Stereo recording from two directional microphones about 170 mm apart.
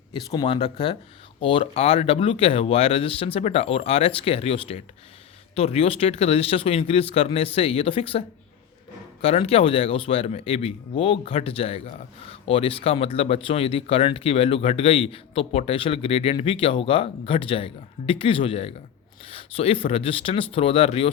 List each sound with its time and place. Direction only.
0.1 s speech: 25° left (ahead or behind)
9.2 s speech: 35° left (ahead or behind)